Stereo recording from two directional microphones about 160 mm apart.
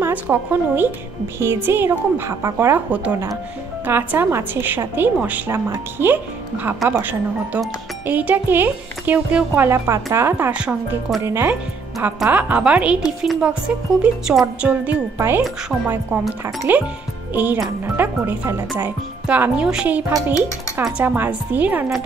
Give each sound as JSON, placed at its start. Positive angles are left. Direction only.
{"t": 0.0, "sound": "speech", "side_deg": -10}